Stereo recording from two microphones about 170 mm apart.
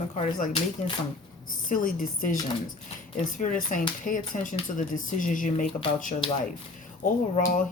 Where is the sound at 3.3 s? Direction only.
50° left (ahead or behind).